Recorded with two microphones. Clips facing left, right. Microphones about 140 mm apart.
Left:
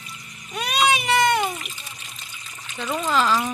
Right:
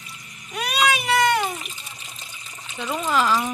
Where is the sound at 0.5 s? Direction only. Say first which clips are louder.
Left 1 dB; 5° right (ahead or behind).